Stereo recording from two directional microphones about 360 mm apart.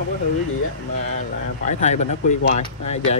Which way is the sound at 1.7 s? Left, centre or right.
Centre.